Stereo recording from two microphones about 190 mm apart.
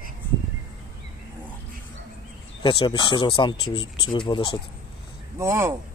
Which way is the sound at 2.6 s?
25° left (ahead or behind).